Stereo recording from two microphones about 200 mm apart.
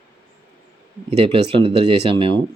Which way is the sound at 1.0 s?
25° right (ahead or behind).